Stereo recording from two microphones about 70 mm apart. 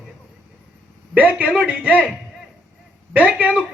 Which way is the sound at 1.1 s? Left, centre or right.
Right.